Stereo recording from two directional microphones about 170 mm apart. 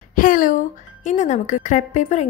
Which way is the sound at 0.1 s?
55° left (ahead or behind).